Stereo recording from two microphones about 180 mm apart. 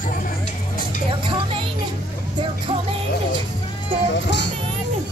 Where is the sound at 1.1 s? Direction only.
30° right (ahead or behind).